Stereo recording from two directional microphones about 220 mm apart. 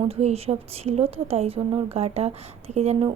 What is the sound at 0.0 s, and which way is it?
A woman's voice, 30° right (ahead or behind).